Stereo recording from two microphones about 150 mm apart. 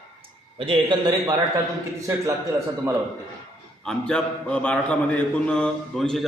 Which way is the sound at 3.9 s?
5° left (ahead or behind).